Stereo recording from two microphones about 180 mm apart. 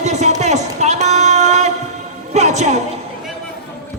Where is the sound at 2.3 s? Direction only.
40° right (ahead or behind).